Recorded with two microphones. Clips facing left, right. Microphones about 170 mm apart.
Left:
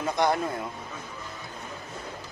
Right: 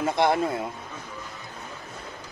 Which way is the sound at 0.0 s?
25° right (ahead or behind).